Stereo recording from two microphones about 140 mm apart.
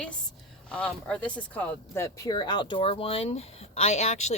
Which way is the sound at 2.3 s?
30° left (ahead or behind).